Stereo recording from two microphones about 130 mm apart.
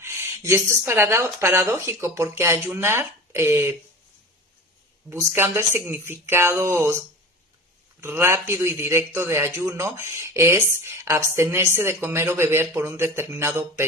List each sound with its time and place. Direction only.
0.0 s speech: 20° right (ahead or behind)
5.0 s speech: 20° right (ahead or behind)
8.0 s speech: 20° right (ahead or behind)